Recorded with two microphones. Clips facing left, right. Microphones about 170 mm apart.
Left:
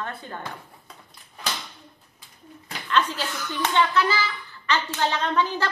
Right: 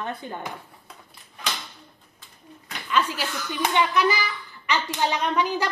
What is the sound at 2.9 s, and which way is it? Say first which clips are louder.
Speech: even; 10° right (ahead or behind).